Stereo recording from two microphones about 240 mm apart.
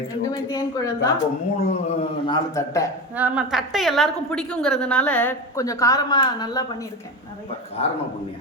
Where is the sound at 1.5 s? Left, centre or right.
Left.